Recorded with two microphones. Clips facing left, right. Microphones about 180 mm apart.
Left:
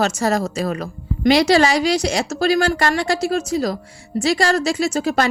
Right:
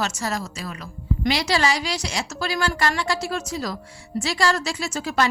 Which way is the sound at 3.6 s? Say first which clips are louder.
Left 7 dB; 40° left (ahead or behind).